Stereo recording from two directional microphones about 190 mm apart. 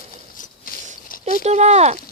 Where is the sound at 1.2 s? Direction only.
35° right (ahead or behind).